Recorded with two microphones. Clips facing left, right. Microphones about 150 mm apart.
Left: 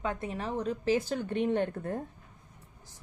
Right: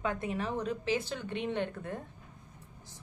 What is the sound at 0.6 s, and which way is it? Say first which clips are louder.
A woman's voice: left 4 dB; 45° left (ahead or behind).